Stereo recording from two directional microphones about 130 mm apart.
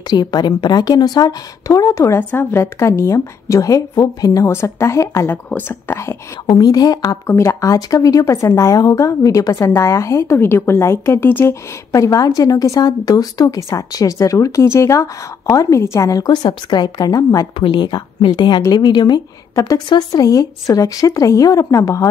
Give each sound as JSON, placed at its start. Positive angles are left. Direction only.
{"t": 0.1, "sound": "a woman's voice", "side_deg": 30}
{"t": 6.4, "sound": "speech", "side_deg": 30}